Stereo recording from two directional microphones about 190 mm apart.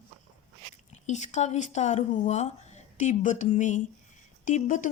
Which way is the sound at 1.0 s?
40° left (ahead or behind).